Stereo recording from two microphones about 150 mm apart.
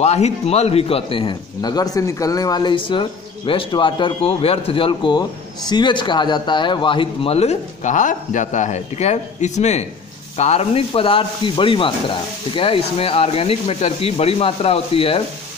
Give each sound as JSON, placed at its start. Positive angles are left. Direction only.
{"t": 0.0, "sound": "a man's voice", "side_deg": 45}